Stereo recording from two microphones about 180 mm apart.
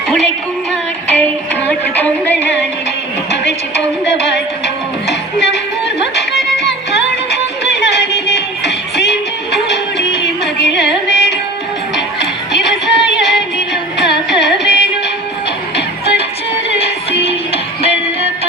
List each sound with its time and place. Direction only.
0.7 s music: 10° left (ahead or behind)
3.4 s music: 70° left (ahead or behind)
12.5 s music: 75° left (ahead or behind)
14.3 s carnatic music: 75° left (ahead or behind)
15.7 s music: 70° left (ahead or behind)
17.2 s music: 35° left (ahead or behind)